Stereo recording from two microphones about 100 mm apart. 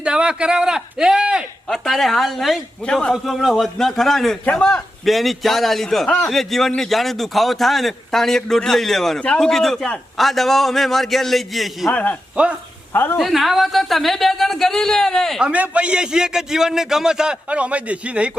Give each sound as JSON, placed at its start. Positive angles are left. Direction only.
{"t": 0.0, "sound": "a man's voice", "side_deg": -10}
{"t": 1.6, "sound": "a man's voice", "side_deg": 5}
{"t": 11.9, "sound": "speech", "side_deg": 15}
{"t": 12.4, "sound": "a man's voice", "side_deg": -10}
{"t": 12.9, "sound": "a woman's voice", "side_deg": 25}
{"t": 13.1, "sound": "a man's voice", "side_deg": 0}
{"t": 15.4, "sound": "a man's voice", "side_deg": -10}